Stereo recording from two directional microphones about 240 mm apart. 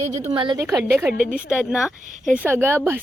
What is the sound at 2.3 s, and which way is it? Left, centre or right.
Speech, centre.